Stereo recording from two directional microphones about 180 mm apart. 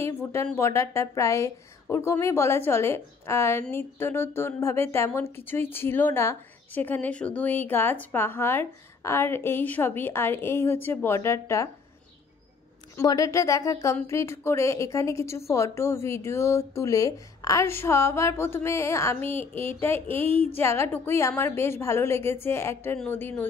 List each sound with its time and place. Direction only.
0.0 s a woman's voice: 15° left (ahead or behind)
12.9 s a woman's voice: 20° left (ahead or behind)